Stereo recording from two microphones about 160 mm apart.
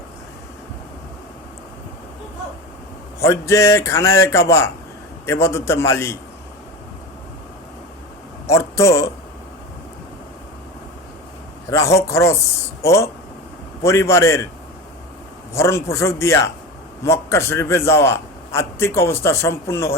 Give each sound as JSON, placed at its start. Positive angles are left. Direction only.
{"t": 3.2, "sound": "a man's voice", "side_deg": 20}
{"t": 8.4, "sound": "a man's voice", "side_deg": 20}
{"t": 11.7, "sound": "a man's voice", "side_deg": 20}
{"t": 15.5, "sound": "a man's voice", "side_deg": 20}